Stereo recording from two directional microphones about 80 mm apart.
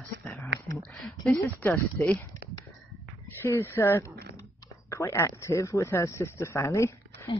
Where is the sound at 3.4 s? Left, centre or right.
Left.